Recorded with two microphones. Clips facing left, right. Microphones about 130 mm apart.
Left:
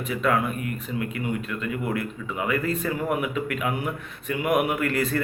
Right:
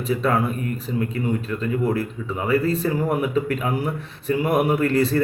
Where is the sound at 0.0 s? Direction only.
30° right (ahead or behind).